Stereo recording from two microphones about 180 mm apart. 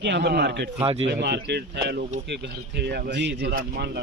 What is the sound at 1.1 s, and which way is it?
A man's voice, 70° right (ahead or behind).